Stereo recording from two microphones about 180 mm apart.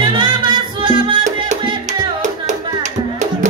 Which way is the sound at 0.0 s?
25° right (ahead or behind).